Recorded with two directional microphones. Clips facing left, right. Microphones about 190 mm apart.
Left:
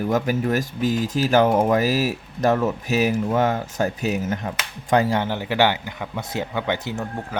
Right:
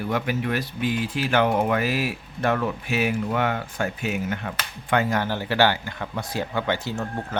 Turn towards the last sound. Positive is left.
turn(degrees=5)  # may be behind; listen again after turning